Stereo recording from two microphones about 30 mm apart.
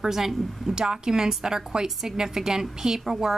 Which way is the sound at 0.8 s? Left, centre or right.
Right.